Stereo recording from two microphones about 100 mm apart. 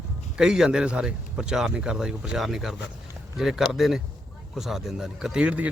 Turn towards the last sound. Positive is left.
turn(degrees=-15)  # may be behind; listen again after turning